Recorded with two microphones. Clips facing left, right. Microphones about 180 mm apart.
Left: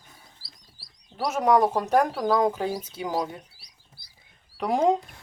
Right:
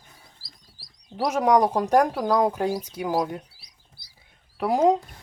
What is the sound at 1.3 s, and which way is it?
Speech, 10° right (ahead or behind).